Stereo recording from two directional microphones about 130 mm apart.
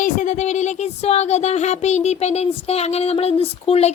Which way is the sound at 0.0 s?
75° left (ahead or behind).